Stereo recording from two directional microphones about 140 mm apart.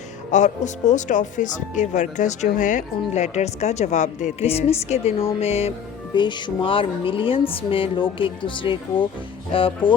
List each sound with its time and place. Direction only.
0.3 s speech: 60° left (ahead or behind)
6.1 s speech: 35° left (ahead or behind)